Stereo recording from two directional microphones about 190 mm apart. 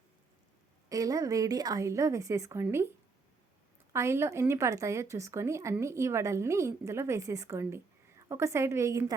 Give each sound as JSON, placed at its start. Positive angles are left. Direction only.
{"t": 0.9, "sound": "a woman's voice", "side_deg": -20}
{"t": 3.9, "sound": "a woman's voice", "side_deg": -15}